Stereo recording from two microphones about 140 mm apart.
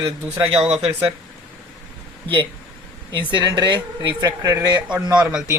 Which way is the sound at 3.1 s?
35° right (ahead or behind).